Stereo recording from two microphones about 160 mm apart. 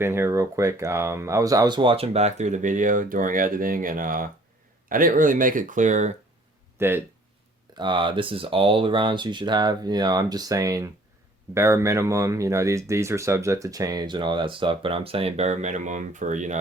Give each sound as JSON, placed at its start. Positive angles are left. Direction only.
{"t": 0.0, "sound": "speech", "side_deg": -15}
{"t": 6.7, "sound": "speech", "side_deg": -15}
{"t": 7.8, "sound": "speech", "side_deg": -30}